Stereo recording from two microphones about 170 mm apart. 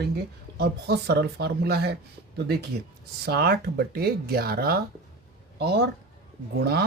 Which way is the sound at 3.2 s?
65° right (ahead or behind).